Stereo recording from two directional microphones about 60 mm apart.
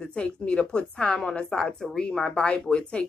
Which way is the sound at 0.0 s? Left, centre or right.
Centre.